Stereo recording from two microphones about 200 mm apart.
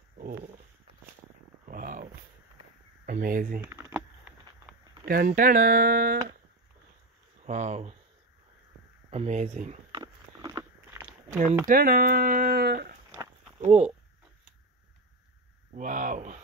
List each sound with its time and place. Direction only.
0.2 s a sound: 45° right (ahead or behind)
1.7 s dog: 45° right (ahead or behind)
3.1 s speech: 45° right (ahead or behind)
3.6 s a sound: 15° right (ahead or behind)
5.0 s speech: 45° right (ahead or behind)
7.4 s speech: 35° right (ahead or behind)
9.1 s speech: 35° right (ahead or behind)
9.9 s biting: 15° right (ahead or behind)
11.2 s speech: 40° right (ahead or behind)
13.6 s speech: 35° right (ahead or behind)
15.7 s speech: 40° right (ahead or behind)